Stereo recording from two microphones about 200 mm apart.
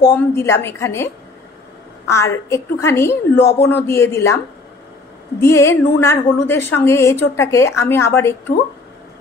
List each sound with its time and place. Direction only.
0.1 s a woman's voice: 10° left (ahead or behind)
5.4 s a woman's voice: 15° left (ahead or behind)